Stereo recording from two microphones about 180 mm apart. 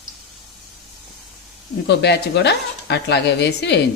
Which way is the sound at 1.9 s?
70° left (ahead or behind).